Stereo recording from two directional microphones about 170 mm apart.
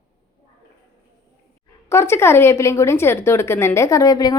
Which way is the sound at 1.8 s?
15° left (ahead or behind).